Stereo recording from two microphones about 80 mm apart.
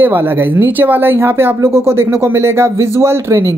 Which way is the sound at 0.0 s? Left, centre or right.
Right.